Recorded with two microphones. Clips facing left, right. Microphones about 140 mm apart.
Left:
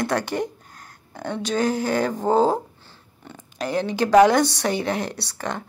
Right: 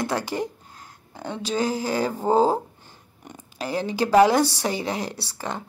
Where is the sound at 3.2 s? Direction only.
10° right (ahead or behind).